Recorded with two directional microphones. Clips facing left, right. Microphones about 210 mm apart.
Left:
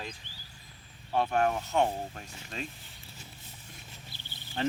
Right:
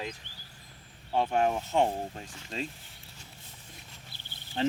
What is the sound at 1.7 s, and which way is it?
Speech, 30° right (ahead or behind).